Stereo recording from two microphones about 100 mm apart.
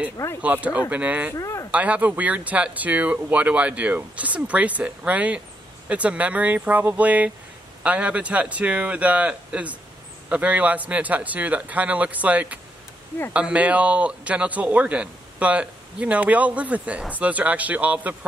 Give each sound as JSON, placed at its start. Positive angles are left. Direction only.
{"t": 0.4, "sound": "speech", "side_deg": -15}
{"t": 1.3, "sound": "speech", "side_deg": 30}
{"t": 1.7, "sound": "speech", "side_deg": -15}